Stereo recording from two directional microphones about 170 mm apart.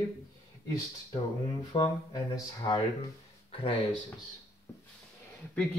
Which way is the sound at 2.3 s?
20° left (ahead or behind).